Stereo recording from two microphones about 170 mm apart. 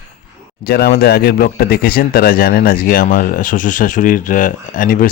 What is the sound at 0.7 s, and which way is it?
Speech, 65° left (ahead or behind).